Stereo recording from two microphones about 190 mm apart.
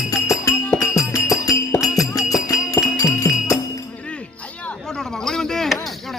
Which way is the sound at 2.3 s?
20° left (ahead or behind).